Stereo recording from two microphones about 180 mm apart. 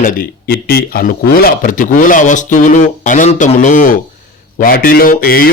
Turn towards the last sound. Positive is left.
turn(degrees=55)  # may be behind; listen again after turning